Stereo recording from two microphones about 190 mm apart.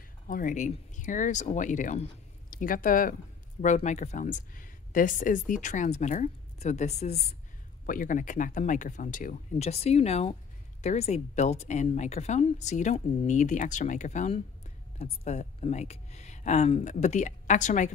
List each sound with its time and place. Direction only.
0.3 s speech: 45° left (ahead or behind)